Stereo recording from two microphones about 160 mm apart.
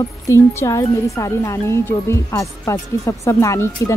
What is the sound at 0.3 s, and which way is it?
A woman's voice, 20° left (ahead or behind).